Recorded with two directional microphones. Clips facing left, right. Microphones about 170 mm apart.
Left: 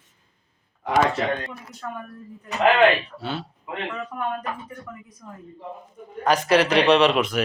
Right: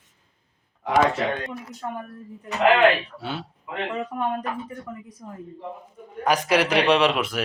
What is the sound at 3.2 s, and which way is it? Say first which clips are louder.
Speech: left 1 dB; 10° right (ahead or behind).